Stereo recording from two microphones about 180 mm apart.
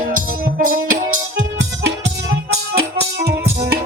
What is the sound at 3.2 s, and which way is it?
Music, 65° right (ahead or behind).